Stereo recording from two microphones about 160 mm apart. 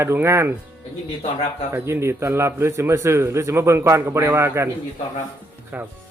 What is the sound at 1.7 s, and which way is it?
A man's voice, 15° right (ahead or behind).